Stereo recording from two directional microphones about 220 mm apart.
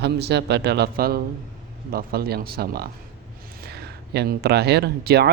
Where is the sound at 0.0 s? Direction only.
50° right (ahead or behind).